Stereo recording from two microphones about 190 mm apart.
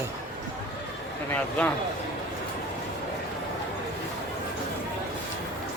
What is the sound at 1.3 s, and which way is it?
Speech, 10° left (ahead or behind).